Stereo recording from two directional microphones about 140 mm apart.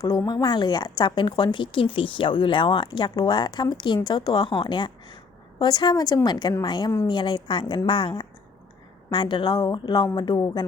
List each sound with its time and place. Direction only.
0.3 s a woman's voice: 30° left (ahead or behind)